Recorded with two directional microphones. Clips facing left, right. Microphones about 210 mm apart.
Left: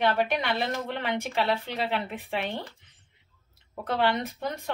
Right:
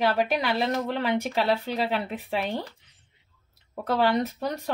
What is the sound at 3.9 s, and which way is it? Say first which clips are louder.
Speech: right 3 dB; 40° right (ahead or behind).